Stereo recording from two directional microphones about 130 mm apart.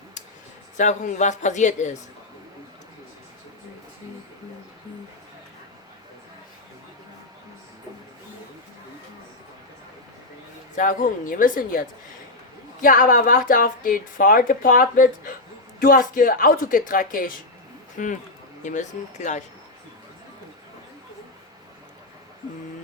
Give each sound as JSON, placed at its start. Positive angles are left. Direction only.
{"t": 0.8, "sound": "speech", "side_deg": 75}
{"t": 10.8, "sound": "speech", "side_deg": 80}
{"t": 18.6, "sound": "speech", "side_deg": 70}